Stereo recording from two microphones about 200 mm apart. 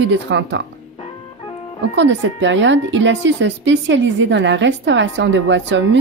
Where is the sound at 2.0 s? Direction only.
65° right (ahead or behind).